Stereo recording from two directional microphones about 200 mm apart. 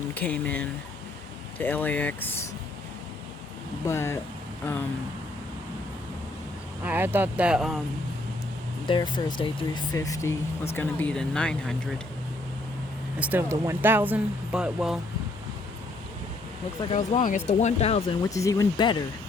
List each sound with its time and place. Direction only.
0.1 s speech: 10° left (ahead or behind)
3.8 s speech: 15° left (ahead or behind)
6.8 s speech: 10° right (ahead or behind)
8.9 s speech: 25° left (ahead or behind); by 11.9 s 5° left (ahead or behind)
13.1 s speech: 10° right (ahead or behind)
16.9 s speech: 35° left (ahead or behind)
18.3 s speech: 15° left (ahead or behind)